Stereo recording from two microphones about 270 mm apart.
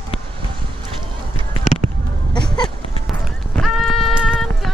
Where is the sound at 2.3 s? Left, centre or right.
Centre.